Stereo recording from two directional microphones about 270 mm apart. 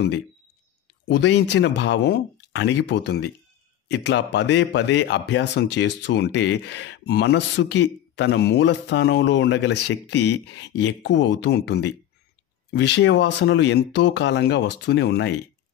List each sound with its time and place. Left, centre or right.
1.0 s a man's voice: left